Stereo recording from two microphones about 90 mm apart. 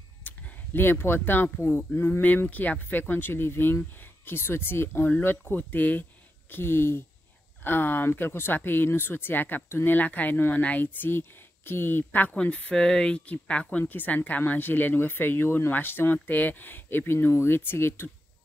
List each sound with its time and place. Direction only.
0.2 s speech: 20° left (ahead or behind)